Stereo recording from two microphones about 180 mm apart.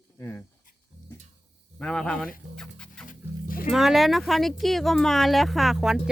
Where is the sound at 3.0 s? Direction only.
50° left (ahead or behind).